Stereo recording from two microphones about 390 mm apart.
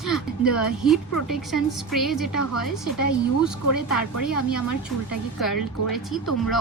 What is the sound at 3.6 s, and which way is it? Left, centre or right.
A woman's voice, left.